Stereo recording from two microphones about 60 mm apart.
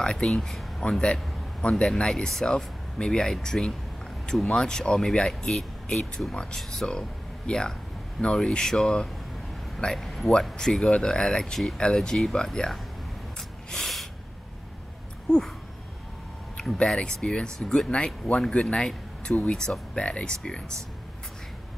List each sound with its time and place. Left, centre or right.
0.0 s speech: centre
13.7 s snort: centre
15.2 s a sound: centre
16.7 s speech: centre